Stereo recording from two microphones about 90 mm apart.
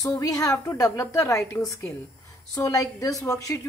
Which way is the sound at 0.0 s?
40° left (ahead or behind).